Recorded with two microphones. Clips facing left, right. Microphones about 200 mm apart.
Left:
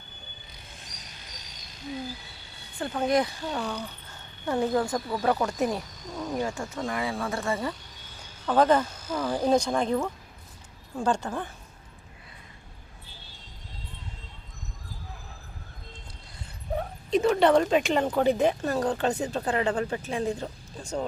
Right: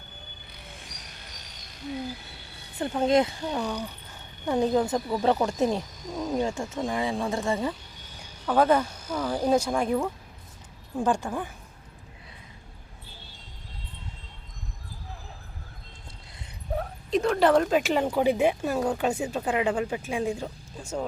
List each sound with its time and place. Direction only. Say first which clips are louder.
2.7 s speech: right 3 dB; 20° right (ahead or behind)
6.1 s speech: right 3 dB; 10° right (ahead or behind)
6.3 s speech: right 2 dB; 20° right (ahead or behind)
8.4 s speech: even; 5° right (ahead or behind)
16.7 s speech: left 1 dB; centre (ahead or behind)